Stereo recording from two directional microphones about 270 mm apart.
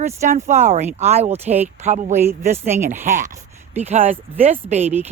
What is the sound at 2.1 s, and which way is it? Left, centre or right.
Speech, centre.